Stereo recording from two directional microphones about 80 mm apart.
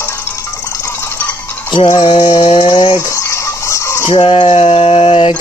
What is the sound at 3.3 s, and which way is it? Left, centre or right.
Chicken, left.